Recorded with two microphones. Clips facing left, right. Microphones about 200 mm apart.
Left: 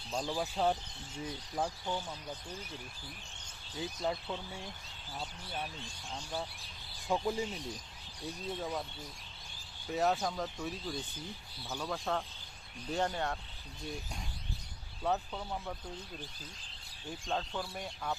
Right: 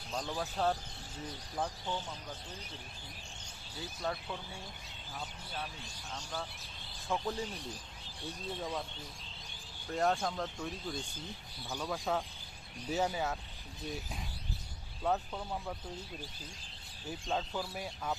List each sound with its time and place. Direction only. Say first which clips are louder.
0.3 s speech: left 1 dB; 10° left (ahead or behind)
3.8 s speech: left 3 dB; 15° left (ahead or behind)
7.1 s speech: left 3 dB; 15° left (ahead or behind)
8.2 s speech: left 1 dB; 5° left (ahead or behind)
9.9 s speech: even; 5° left (ahead or behind)
15.0 s speech: even; centre (ahead or behind)
17.1 s speech: right 1 dB; 5° right (ahead or behind)